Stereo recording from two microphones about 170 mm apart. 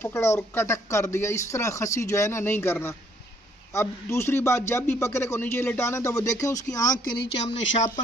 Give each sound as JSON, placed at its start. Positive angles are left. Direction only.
{"t": 0.0, "sound": "a man's voice", "side_deg": 15}